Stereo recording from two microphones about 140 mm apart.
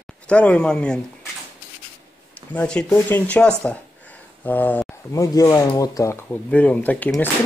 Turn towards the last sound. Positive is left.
turn(degrees=10)  # may be behind; listen again after turning